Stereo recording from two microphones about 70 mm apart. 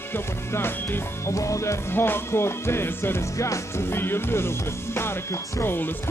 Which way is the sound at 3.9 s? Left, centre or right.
Left.